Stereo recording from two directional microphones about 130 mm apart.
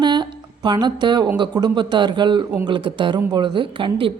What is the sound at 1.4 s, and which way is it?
A woman's voice, 35° right (ahead or behind).